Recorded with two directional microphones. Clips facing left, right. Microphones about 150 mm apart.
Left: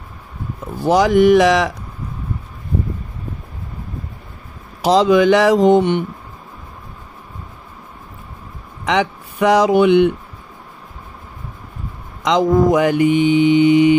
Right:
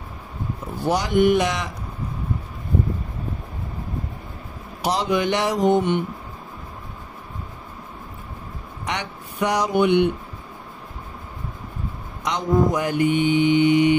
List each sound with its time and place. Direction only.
0.8 s mantra: 90° left
4.8 s mantra: 90° left
8.8 s mantra: 90° left
12.3 s mantra: 90° left